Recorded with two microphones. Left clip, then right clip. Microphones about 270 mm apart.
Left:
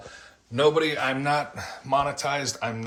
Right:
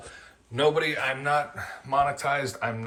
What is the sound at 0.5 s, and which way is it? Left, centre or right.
A man's voice, left.